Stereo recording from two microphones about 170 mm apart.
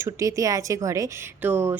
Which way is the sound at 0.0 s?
20° right (ahead or behind).